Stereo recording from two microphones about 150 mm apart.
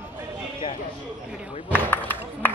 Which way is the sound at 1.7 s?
15° left (ahead or behind).